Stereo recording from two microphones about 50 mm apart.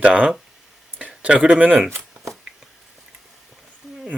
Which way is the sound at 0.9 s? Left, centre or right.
Right.